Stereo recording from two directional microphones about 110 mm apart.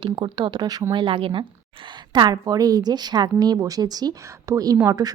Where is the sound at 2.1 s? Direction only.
40° right (ahead or behind).